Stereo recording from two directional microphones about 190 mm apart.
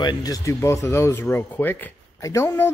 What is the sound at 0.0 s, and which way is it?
Speech, 20° left (ahead or behind).